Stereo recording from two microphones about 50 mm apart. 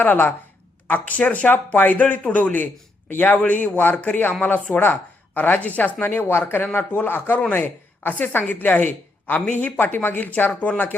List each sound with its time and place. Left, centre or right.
0.0 s speech: left
6.0 s speech: left